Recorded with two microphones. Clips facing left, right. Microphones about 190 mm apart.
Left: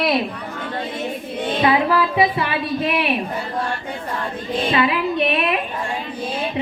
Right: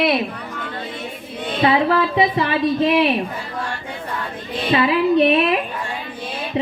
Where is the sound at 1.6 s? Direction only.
30° right (ahead or behind).